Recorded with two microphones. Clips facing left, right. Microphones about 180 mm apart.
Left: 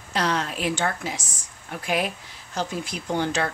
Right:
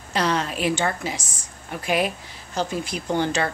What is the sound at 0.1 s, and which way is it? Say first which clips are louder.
A woman's voice: right 2 dB; centre (ahead or behind).